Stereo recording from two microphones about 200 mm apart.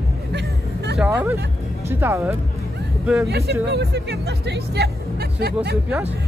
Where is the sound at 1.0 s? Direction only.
10° right (ahead or behind).